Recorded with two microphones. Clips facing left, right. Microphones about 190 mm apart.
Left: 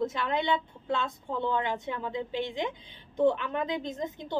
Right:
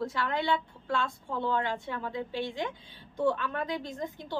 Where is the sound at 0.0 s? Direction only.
20° left (ahead or behind).